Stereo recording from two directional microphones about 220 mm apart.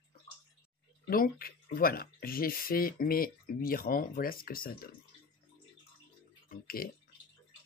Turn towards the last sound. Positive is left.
turn(degrees=40)  # may be behind; listen again after turning